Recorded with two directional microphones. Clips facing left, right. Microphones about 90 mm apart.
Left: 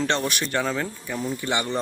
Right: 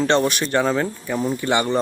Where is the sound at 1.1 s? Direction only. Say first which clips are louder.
Right 6 dB; 55° right (ahead or behind).